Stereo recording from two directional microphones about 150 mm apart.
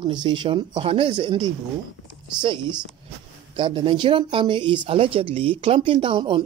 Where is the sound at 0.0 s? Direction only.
30° right (ahead or behind).